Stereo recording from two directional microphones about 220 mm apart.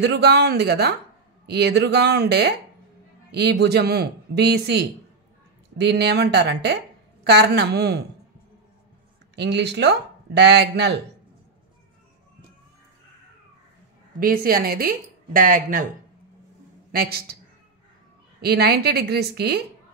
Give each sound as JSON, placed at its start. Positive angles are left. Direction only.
{"t": 0.0, "sound": "speech", "side_deg": -50}
{"t": 9.3, "sound": "speech", "side_deg": -50}
{"t": 14.2, "sound": "a woman's voice", "side_deg": -40}
{"t": 16.9, "sound": "speech", "side_deg": -45}
{"t": 18.4, "sound": "speech", "side_deg": -45}